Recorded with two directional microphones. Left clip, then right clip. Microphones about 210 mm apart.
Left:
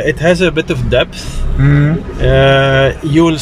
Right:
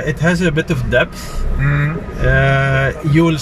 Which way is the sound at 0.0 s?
5° left (ahead or behind).